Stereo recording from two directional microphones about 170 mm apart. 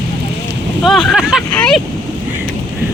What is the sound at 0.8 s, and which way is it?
Speech, centre (ahead or behind).